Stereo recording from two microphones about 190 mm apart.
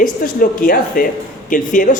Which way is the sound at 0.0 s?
45° left (ahead or behind).